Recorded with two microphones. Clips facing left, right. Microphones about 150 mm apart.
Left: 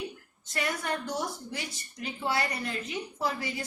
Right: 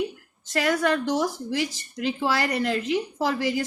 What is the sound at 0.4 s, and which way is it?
A woman's voice, 90° right.